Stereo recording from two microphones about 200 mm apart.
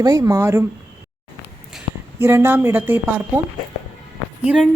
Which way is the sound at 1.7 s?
10° right (ahead or behind).